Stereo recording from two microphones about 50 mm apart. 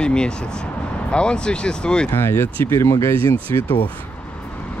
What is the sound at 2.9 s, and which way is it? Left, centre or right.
Speech, left.